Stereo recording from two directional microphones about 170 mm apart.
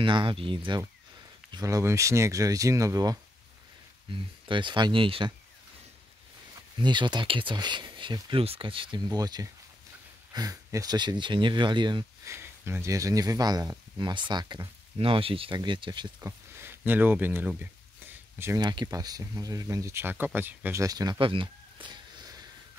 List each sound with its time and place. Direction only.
0.0 s speech: 30° right (ahead or behind)
6.8 s speech: 25° right (ahead or behind)
12.3 s speech: 15° right (ahead or behind)
16.2 s speech: 15° right (ahead or behind)
18.6 s speech: 25° right (ahead or behind)